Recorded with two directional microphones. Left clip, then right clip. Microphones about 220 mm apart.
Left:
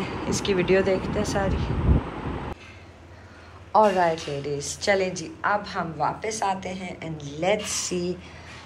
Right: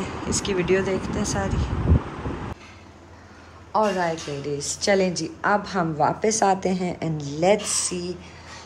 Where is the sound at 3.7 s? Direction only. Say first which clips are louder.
Left 3 dB; 10° right (ahead or behind).